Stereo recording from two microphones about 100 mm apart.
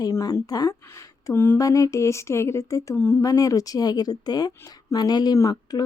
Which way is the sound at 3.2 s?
35° left (ahead or behind).